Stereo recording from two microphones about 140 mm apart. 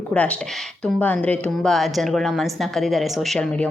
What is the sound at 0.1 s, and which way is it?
A woman's voice, 10° left (ahead or behind).